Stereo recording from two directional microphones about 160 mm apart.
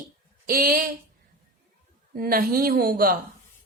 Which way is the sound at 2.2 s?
65° right (ahead or behind).